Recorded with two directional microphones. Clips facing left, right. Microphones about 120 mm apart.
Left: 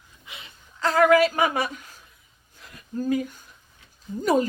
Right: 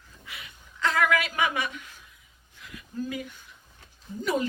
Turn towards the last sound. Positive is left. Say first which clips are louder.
# left 6 dB
turn(degrees=40)  # may be behind; listen again after turning